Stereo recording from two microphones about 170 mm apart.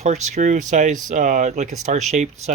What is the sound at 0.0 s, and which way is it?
Speech, 45° right (ahead or behind).